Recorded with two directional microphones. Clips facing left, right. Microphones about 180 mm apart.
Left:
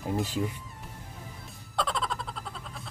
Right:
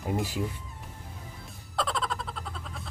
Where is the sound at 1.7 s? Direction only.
Centre (ahead or behind).